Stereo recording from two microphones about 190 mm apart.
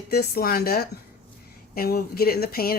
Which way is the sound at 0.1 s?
55° left (ahead or behind).